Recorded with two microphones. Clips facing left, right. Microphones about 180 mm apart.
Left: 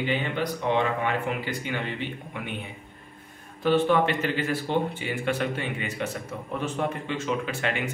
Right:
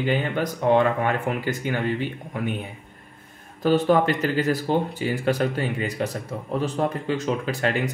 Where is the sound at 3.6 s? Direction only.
40° right (ahead or behind).